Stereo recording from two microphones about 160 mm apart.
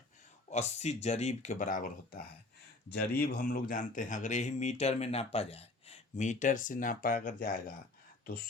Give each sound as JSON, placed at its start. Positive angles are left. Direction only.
{"t": 0.5, "sound": "speech", "side_deg": 45}
{"t": 2.9, "sound": "speech", "side_deg": 90}